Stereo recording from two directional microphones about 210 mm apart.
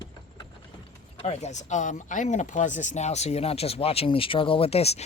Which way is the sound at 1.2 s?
30° left (ahead or behind).